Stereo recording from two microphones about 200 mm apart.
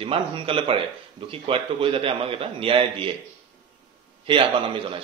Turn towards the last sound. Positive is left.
turn(degrees=-25)  # may be behind; listen again after turning